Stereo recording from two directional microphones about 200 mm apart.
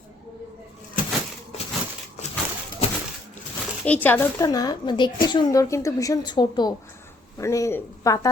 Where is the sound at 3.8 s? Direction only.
10° left (ahead or behind).